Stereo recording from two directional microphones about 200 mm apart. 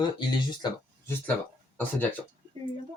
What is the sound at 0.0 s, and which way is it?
Speech, 20° left (ahead or behind).